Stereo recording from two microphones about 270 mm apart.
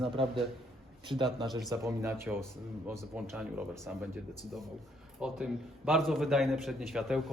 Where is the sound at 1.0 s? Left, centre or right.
Centre.